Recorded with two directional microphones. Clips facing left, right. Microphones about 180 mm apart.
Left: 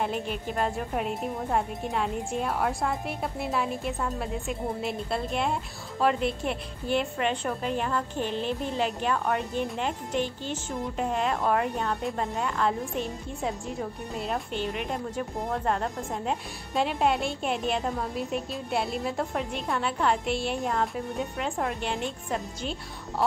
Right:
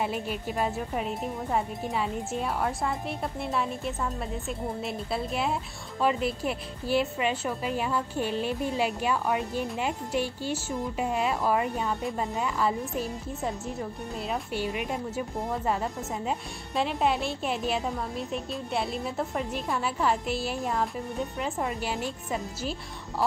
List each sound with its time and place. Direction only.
0.0 s speech: 5° right (ahead or behind)